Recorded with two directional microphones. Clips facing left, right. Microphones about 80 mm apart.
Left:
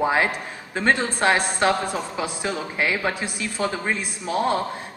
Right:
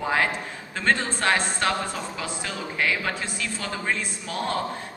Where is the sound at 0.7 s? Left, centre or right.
Centre.